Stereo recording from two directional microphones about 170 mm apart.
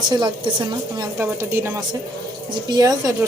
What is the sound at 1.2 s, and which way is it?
A woman's voice, 15° right (ahead or behind).